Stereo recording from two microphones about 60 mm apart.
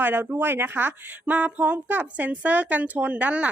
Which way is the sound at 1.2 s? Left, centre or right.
Right.